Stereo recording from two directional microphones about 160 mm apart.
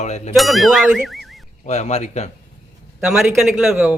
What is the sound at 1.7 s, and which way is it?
Speech, 45° left (ahead or behind).